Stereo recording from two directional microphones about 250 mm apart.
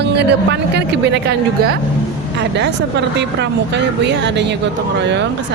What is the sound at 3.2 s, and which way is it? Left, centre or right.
Speech, right.